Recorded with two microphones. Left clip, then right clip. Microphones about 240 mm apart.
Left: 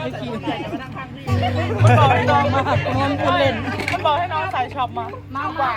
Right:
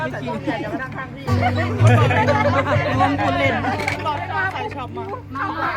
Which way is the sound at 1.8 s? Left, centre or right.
Centre.